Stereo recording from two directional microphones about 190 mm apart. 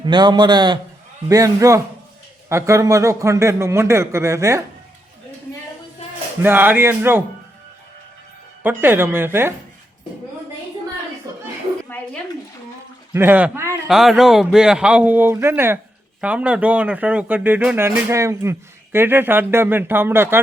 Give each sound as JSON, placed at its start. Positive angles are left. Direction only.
{"t": 0.0, "sound": "a man's voice", "side_deg": -25}
{"t": 6.4, "sound": "speech", "side_deg": -10}
{"t": 8.6, "sound": "speech", "side_deg": -10}
{"t": 11.3, "sound": "a sound", "side_deg": -20}
{"t": 11.9, "sound": "a sound", "side_deg": 10}
{"t": 13.1, "sound": "speech", "side_deg": -10}